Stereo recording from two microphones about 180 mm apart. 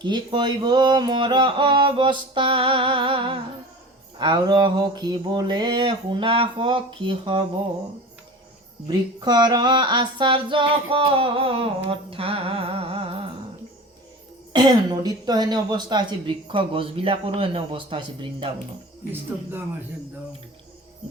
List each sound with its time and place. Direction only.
0.0 s female singing: 25° right (ahead or behind)
8.9 s female singing: 25° right (ahead or behind)
14.5 s female singing: 25° right (ahead or behind)
19.1 s speech: 10° right (ahead or behind)